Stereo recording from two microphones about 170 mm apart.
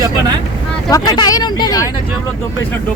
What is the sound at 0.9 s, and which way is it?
Speech, 20° left (ahead or behind).